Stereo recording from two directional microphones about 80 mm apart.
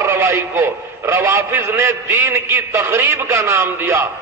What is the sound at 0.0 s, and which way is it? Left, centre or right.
A man's voice, right.